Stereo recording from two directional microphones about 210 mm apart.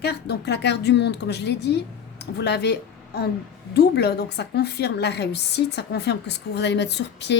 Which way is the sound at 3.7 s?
50° left (ahead or behind).